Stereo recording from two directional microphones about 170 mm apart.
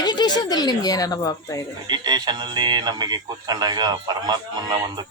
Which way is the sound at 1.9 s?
25° right (ahead or behind).